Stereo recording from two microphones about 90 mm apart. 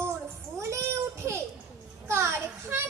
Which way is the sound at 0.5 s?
30° right (ahead or behind).